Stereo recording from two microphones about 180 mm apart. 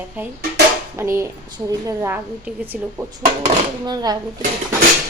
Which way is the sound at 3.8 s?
20° right (ahead or behind).